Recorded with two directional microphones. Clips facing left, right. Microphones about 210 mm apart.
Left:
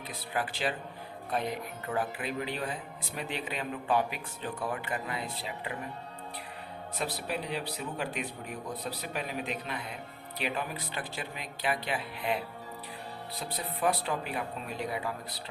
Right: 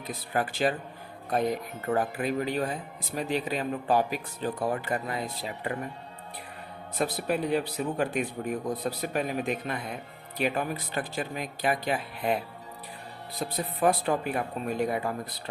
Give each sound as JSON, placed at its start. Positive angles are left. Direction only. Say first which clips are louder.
{"t": 0.1, "sound": "speech", "louder": "right 5 dB", "side_deg": -45}
{"t": 7.0, "sound": "speech", "louder": "right 7 dB", "side_deg": -50}
{"t": 13.4, "sound": "speech", "louder": "right 5 dB", "side_deg": -45}